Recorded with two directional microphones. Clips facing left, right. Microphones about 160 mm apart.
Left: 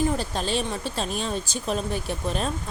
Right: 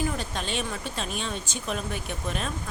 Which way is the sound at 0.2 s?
35° left (ahead or behind).